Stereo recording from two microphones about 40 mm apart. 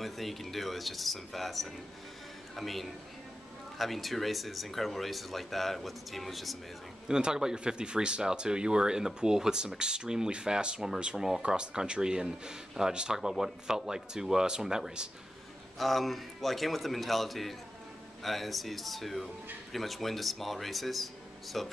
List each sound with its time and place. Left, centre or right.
0.0 s speech: centre
7.1 s speech: centre
11.1 s speech: centre
11.4 s speech: right
15.8 s speech: centre